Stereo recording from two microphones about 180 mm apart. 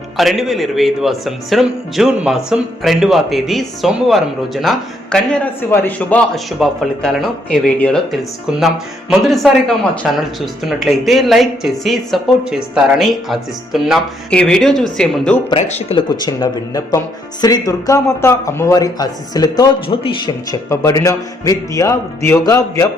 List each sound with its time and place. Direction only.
0.2 s a man's voice: centre (ahead or behind)
15.4 s speech: 35° left (ahead or behind)
16.2 s a man's voice: 20° left (ahead or behind)